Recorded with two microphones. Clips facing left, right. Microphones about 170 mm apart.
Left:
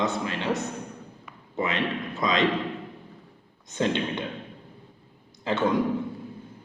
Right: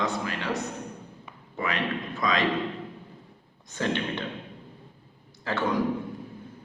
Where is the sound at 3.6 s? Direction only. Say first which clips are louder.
Left 3 dB; 20° left (ahead or behind).